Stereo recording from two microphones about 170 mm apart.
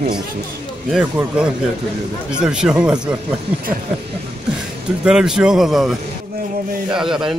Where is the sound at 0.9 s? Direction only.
10° right (ahead or behind).